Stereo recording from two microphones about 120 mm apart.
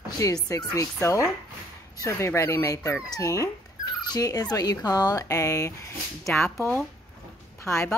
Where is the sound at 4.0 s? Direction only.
30° left (ahead or behind).